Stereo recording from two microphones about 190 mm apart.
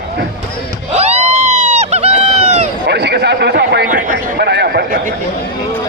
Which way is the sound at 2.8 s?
60° right (ahead or behind).